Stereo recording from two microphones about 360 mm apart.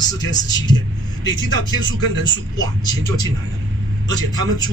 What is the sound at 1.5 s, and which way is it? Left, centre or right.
Speech, right.